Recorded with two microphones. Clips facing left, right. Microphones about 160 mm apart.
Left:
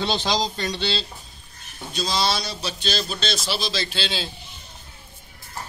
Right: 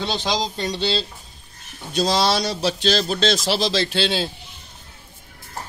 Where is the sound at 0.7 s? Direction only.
40° right (ahead or behind).